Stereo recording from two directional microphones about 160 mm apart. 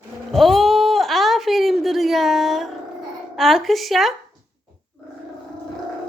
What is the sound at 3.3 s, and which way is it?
Speech, centre (ahead or behind).